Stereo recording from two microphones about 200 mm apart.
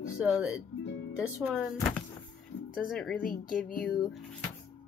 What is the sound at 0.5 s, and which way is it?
Music, 65° left (ahead or behind).